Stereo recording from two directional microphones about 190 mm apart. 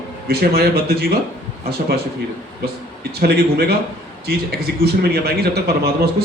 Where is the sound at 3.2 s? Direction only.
55° right (ahead or behind).